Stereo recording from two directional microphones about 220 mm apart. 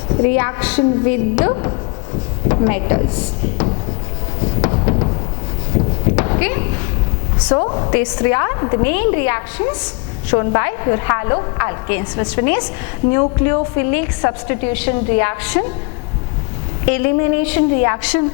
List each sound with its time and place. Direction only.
0.3 s a woman's voice: 10° left (ahead or behind)
1.5 s a woman's voice: 25° left (ahead or behind)
4.6 s a sound: 20° left (ahead or behind)
6.1 s a sound: 15° left (ahead or behind)
7.4 s a woman's voice: 25° left (ahead or behind)
16.9 s a woman's voice: 15° left (ahead or behind)